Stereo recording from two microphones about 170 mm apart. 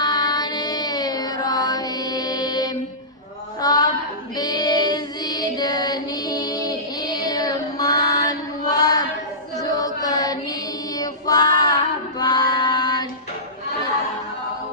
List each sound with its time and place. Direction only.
0.0 s music: 25° left (ahead or behind)
3.6 s a sound: 20° left (ahead or behind)
4.4 s child singing: 25° left (ahead or behind)
9.6 s a sound: 20° left (ahead or behind)
10.9 s female singing: 20° left (ahead or behind)
12.2 s child singing: 25° left (ahead or behind)